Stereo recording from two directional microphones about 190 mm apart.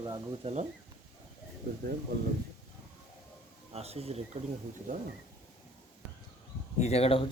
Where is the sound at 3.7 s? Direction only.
30° right (ahead or behind).